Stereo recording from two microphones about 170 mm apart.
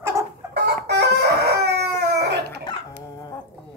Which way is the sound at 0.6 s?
75° right (ahead or behind).